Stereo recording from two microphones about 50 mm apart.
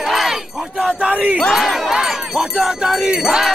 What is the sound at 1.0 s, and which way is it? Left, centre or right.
Battle cry, right.